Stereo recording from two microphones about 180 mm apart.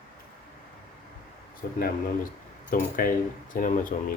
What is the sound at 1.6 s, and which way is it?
Speech, 55° left (ahead or behind).